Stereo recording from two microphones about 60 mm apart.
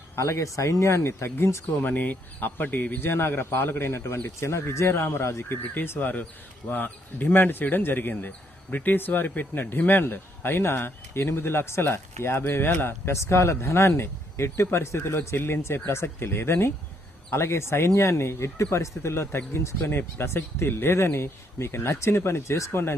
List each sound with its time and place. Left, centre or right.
0.2 s speech: left
1.8 s a man's voice: left
13.1 s speech: left
15.4 s a man's voice: left
19.9 s speech: left